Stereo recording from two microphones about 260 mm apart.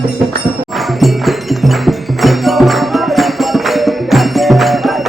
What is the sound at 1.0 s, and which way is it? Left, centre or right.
Music, centre.